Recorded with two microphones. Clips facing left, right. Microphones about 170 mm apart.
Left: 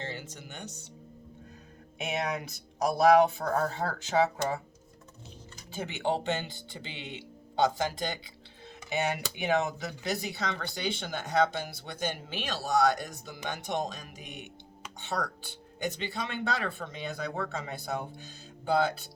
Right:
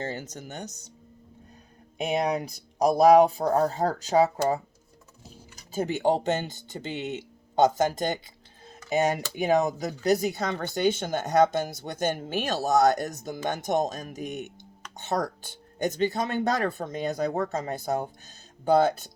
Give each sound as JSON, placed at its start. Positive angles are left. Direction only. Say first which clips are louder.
{"t": 0.0, "sound": "speech", "louder": "right 6 dB", "side_deg": -45}
{"t": 2.0, "sound": "speech", "louder": "right 6 dB", "side_deg": -35}
{"t": 5.7, "sound": "speech", "louder": "right 7 dB", "side_deg": -40}
{"t": 8.6, "sound": "dishes", "louder": "right 6 dB", "side_deg": -40}
{"t": 9.3, "sound": "speech", "louder": "right 4 dB", "side_deg": -40}